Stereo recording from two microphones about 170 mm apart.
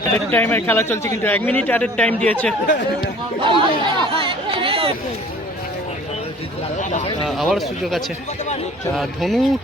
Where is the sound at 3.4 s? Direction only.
30° right (ahead or behind).